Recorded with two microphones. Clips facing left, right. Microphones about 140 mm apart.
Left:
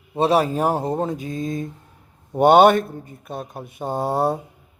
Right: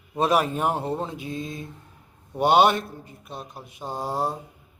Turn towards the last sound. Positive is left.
turn(degrees=60)  # may be behind; listen again after turning